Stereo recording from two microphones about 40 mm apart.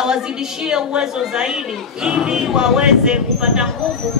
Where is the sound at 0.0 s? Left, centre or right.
Centre.